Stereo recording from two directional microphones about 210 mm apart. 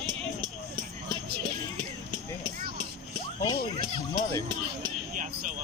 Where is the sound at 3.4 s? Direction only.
25° left (ahead or behind).